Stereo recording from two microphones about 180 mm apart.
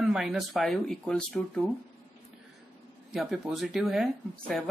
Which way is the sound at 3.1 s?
Centre (ahead or behind).